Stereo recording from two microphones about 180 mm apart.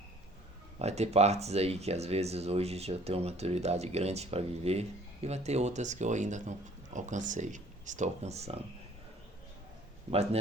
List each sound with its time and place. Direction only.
0.8 s speech: 35° right (ahead or behind)